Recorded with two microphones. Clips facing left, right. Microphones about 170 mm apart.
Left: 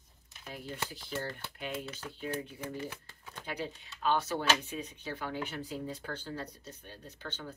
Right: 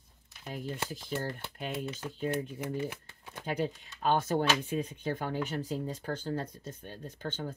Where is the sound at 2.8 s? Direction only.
20° right (ahead or behind).